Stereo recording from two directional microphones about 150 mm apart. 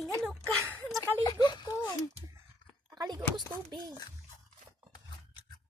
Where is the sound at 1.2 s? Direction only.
30° left (ahead or behind).